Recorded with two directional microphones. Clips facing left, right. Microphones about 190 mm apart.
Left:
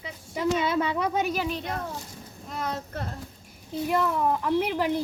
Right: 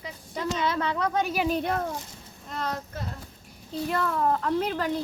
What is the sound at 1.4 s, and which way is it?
Speech, 50° right (ahead or behind).